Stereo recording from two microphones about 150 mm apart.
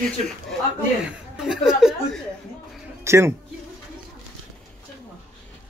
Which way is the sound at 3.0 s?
20° right (ahead or behind).